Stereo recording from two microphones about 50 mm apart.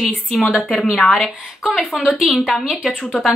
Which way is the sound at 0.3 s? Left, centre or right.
Centre.